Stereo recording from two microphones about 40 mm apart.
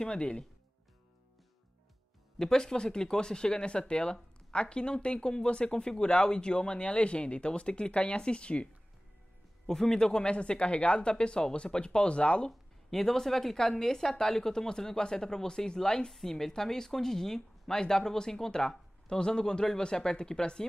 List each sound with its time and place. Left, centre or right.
0.0 s speech: left
2.3 s speech: centre
9.7 s speech: centre
12.4 s speech: centre